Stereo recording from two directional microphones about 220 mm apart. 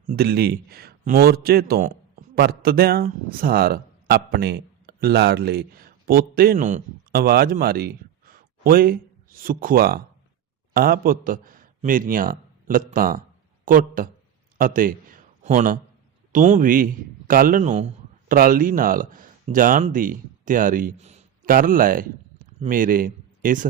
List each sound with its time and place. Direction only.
0.1 s a man's voice: 45° right (ahead or behind)